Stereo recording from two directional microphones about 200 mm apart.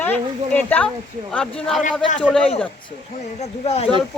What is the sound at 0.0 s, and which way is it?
Speech, 10° left (ahead or behind).